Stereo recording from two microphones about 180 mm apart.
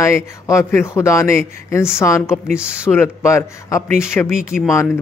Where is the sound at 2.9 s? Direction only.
15° left (ahead or behind).